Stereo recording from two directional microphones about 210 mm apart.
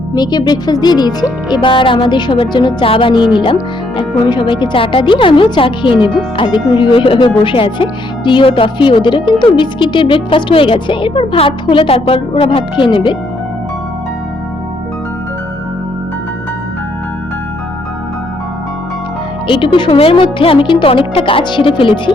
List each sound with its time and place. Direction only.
0.1 s speech: 20° left (ahead or behind)
19.5 s speech: 25° left (ahead or behind)